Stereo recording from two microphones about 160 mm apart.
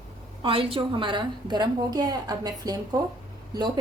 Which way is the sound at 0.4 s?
35° right (ahead or behind).